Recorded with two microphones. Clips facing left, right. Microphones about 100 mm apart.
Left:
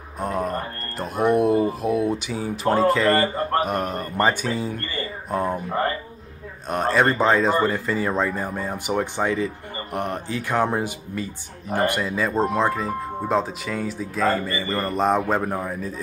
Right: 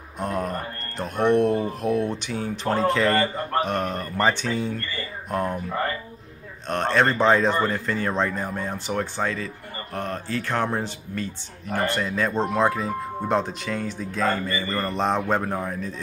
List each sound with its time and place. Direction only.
0.2 s speech: 5° left (ahead or behind)
6.7 s speech: 5° left (ahead or behind)